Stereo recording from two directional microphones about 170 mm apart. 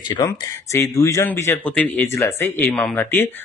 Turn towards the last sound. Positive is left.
turn(degrees=10)  # may be behind; listen again after turning